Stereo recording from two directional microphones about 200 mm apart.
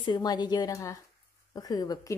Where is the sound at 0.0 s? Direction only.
20° left (ahead or behind).